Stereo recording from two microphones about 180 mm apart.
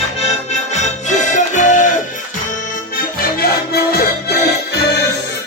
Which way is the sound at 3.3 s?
60° left (ahead or behind).